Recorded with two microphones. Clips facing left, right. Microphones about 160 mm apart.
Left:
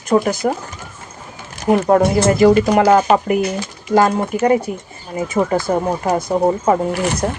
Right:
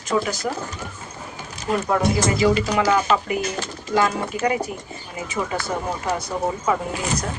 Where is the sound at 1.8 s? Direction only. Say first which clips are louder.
Left 7 dB; 45° left (ahead or behind).